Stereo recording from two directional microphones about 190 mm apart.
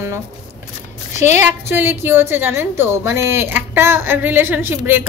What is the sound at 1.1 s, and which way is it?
Speech, 40° left (ahead or behind).